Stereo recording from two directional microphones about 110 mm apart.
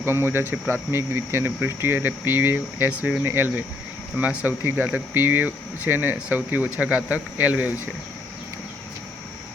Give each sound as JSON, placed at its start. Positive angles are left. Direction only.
{"t": 0.0, "sound": "speech", "side_deg": -20}